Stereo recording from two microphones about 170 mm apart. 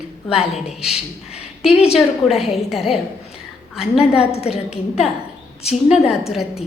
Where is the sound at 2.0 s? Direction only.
Centre (ahead or behind).